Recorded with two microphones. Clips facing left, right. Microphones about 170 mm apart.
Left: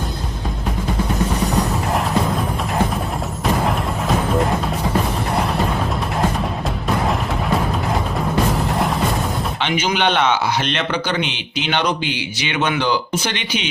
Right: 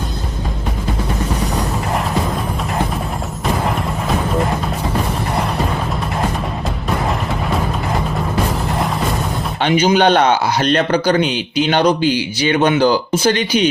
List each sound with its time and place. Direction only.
9.6 s a man's voice: 40° right (ahead or behind)